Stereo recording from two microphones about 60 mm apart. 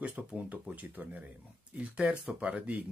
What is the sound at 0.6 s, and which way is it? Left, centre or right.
Speech, right.